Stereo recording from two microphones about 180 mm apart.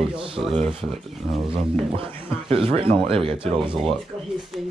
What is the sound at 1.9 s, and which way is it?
Speech, 30° right (ahead or behind).